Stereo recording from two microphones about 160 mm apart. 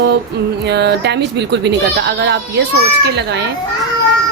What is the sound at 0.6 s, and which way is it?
Speech, 90° right.